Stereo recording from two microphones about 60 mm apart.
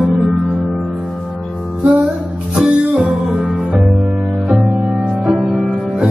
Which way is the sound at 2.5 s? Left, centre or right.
Centre.